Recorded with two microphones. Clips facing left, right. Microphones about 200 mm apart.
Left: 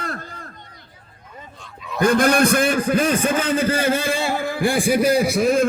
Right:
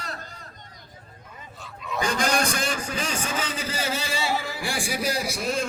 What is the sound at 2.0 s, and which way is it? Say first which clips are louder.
A man's voice: left 10 dB; 55° left (ahead or behind).